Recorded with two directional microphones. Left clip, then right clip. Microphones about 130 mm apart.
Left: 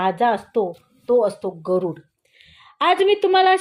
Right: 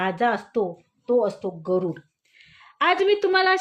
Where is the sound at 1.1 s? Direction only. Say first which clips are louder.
Left 4 dB; 50° left (ahead or behind).